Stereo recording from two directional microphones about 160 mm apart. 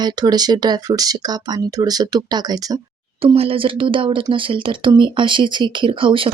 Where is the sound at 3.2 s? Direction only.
35° right (ahead or behind).